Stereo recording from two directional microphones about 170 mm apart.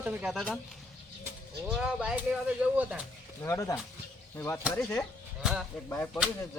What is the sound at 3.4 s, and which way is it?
Speech, 15° left (ahead or behind).